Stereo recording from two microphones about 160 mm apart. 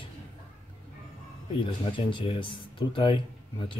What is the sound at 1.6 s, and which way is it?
Speech, 30° left (ahead or behind).